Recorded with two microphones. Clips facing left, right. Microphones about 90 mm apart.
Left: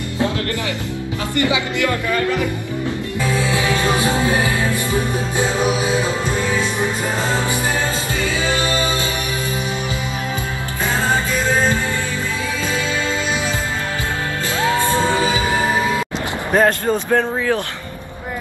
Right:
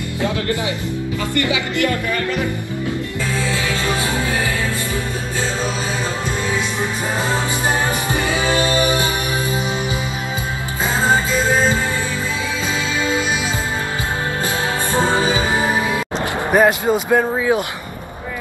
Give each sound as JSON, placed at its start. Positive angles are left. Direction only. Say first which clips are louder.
{"t": 1.3, "sound": "speech", "louder": "left 2 dB", "side_deg": 20}
{"t": 3.2, "sound": "music", "louder": "left 5 dB", "side_deg": 20}
{"t": 8.1, "sound": "music", "louder": "right 3 dB", "side_deg": -20}
{"t": 14.7, "sound": "music", "louder": "left 2 dB", "side_deg": -20}
{"t": 16.5, "sound": "speech", "louder": "right 1 dB", "side_deg": -10}